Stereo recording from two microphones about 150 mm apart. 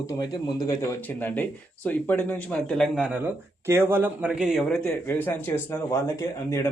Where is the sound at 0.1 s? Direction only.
25° left (ahead or behind).